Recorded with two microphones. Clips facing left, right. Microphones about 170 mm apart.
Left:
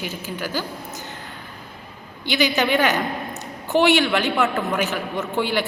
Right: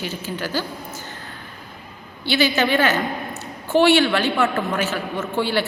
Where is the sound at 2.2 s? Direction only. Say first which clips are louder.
Right 1 dB; 15° left (ahead or behind).